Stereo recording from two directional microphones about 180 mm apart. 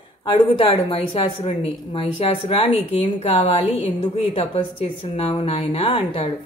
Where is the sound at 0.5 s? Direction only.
35° left (ahead or behind).